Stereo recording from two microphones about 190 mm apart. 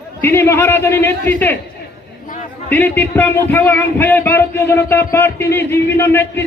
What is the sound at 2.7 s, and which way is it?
A man's voice, 10° left (ahead or behind).